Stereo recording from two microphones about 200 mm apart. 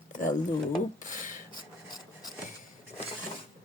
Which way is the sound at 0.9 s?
40° left (ahead or behind).